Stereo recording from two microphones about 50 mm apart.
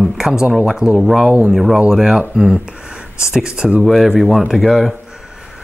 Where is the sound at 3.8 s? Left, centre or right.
Centre.